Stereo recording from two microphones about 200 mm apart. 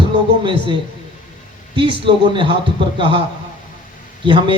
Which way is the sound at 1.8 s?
25° right (ahead or behind).